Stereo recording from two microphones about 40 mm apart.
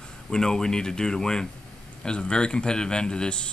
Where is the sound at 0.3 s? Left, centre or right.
Centre.